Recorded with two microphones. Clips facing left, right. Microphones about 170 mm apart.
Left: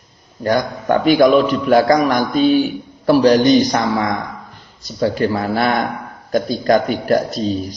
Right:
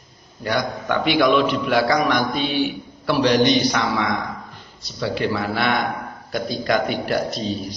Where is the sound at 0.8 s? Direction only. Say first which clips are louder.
Left 7 dB; 45° left (ahead or behind).